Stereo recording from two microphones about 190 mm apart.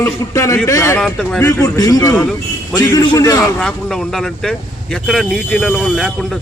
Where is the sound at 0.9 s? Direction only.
5° left (ahead or behind).